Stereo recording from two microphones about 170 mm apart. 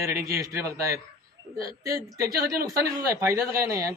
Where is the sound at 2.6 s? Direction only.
20° right (ahead or behind).